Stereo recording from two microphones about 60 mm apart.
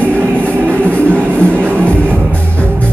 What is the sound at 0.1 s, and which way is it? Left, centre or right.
Music, right.